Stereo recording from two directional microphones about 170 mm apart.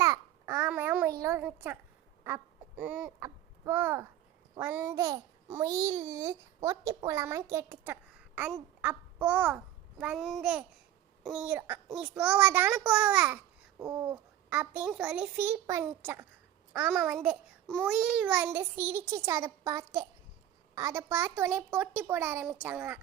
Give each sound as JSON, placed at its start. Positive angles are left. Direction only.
{"t": 0.0, "sound": "babbling", "side_deg": -15}
{"t": 1.5, "sound": "a child's voice", "side_deg": -10}
{"t": 2.2, "sound": "quack", "side_deg": -10}
{"t": 3.2, "sound": "a child's voice", "side_deg": -20}
{"t": 8.8, "sound": "babbling", "side_deg": -10}
{"t": 10.0, "sound": "a child's voice", "side_deg": -5}
{"t": 13.7, "sound": "babbling", "side_deg": -25}
{"t": 14.5, "sound": "a child's voice", "side_deg": -10}